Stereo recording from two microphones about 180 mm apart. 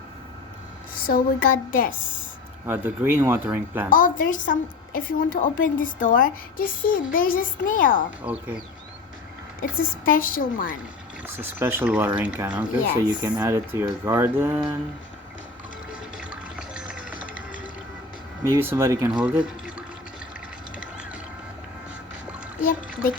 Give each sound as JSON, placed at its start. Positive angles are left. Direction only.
{"t": 0.9, "sound": "a woman's voice", "side_deg": 55}
{"t": 2.6, "sound": "speech", "side_deg": -10}
{"t": 3.8, "sound": "a woman's voice", "side_deg": 50}
{"t": 8.2, "sound": "speech", "side_deg": -5}
{"t": 9.6, "sound": "a woman's voice", "side_deg": 50}
{"t": 11.3, "sound": "speech", "side_deg": -10}
{"t": 15.9, "sound": "a sound", "side_deg": -5}
{"t": 18.5, "sound": "speech", "side_deg": -15}
{"t": 20.7, "sound": "vehicle", "side_deg": -5}